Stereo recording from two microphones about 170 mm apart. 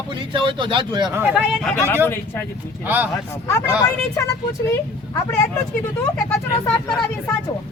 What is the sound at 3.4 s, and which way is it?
Speech, 15° left (ahead or behind).